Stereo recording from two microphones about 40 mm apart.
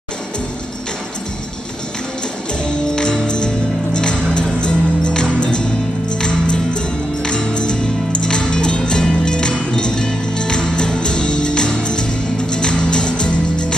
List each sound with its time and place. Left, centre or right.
3.0 s music: centre